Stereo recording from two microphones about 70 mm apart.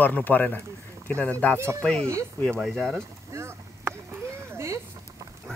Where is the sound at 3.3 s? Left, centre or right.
Right.